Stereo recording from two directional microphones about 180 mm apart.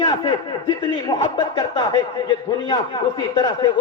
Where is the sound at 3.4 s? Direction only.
20° left (ahead or behind).